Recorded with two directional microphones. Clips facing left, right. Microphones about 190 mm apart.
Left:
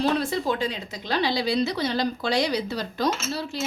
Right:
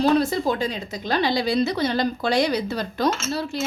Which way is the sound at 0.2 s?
40° right (ahead or behind).